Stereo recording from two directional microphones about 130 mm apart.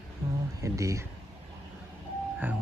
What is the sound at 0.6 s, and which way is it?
Speech, 25° right (ahead or behind).